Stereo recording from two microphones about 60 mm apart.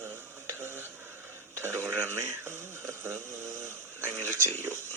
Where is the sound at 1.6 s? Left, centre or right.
Right.